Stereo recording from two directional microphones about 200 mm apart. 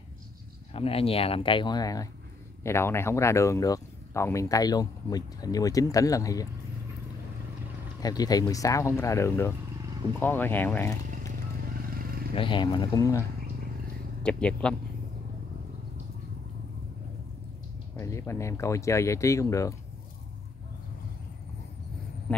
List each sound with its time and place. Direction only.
0.7 s speech: 30° left (ahead or behind)
8.0 s speech: 20° left (ahead or behind)
12.4 s speech: 25° left (ahead or behind)
14.2 s speech: 5° left (ahead or behind)
17.9 s speech: 15° left (ahead or behind)